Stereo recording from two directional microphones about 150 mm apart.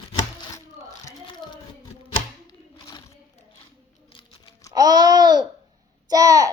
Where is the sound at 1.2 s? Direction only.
30° left (ahead or behind).